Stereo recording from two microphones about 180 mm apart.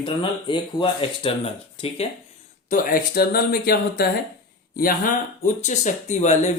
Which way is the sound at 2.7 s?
50° left (ahead or behind).